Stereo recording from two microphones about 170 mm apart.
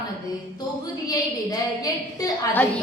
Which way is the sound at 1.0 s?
20° left (ahead or behind).